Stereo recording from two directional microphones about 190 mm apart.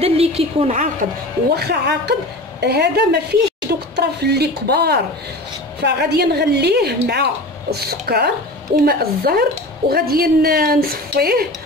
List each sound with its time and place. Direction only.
0.0 s a woman's voice: 30° right (ahead or behind)
1.5 s a woman's voice: 60° right (ahead or behind)